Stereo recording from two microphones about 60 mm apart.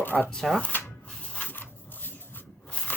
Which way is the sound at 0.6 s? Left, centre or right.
Left.